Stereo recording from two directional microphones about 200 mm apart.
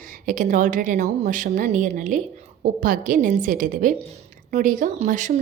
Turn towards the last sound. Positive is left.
turn(degrees=-40)  # may be behind; listen again after turning